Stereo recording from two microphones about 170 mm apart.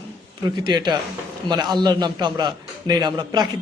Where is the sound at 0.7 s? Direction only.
25° right (ahead or behind).